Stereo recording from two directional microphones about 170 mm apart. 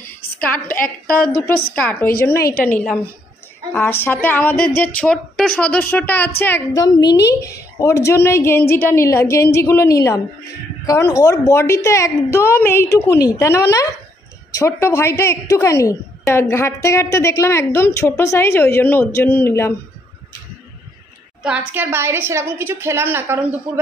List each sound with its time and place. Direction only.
0.7 s a woman's voice: 55° left (ahead or behind)
1.8 s a woman's voice: 10° left (ahead or behind)
2.3 s a woman's voice: 65° left (ahead or behind)
2.6 s a woman's voice: 5° left (ahead or behind)
21.4 s a woman's voice: 10° right (ahead or behind)